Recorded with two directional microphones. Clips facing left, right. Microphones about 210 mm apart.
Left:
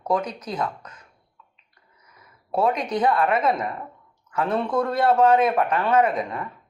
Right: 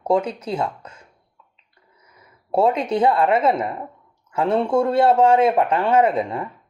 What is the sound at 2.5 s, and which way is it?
Speech, 25° right (ahead or behind).